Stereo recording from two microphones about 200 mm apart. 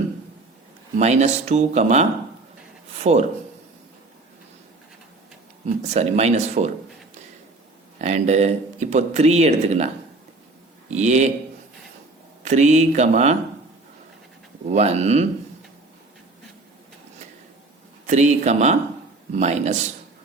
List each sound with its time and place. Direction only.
0.9 s speech: 35° right (ahead or behind)
5.8 s speech: 35° right (ahead or behind)
7.9 s speech: 35° right (ahead or behind)
10.9 s speech: 35° right (ahead or behind)
12.5 s speech: 35° right (ahead or behind)
14.7 s speech: 35° right (ahead or behind)
18.0 s speech: 35° right (ahead or behind)